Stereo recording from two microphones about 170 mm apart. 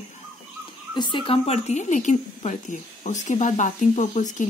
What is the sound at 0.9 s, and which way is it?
A woman's voice, 25° left (ahead or behind).